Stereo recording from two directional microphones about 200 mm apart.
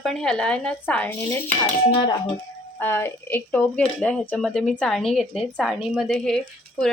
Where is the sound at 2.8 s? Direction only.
10° left (ahead or behind).